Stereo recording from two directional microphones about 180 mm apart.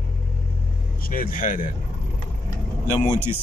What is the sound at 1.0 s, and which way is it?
Speech, 50° left (ahead or behind).